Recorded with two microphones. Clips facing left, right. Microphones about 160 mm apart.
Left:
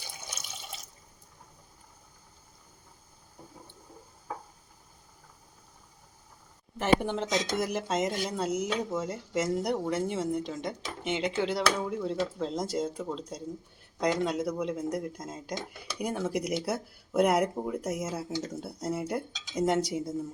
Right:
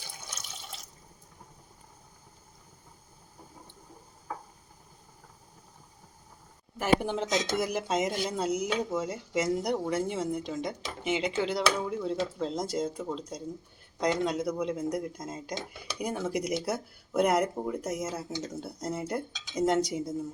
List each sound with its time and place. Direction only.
6.7 s speech: 5° right (ahead or behind)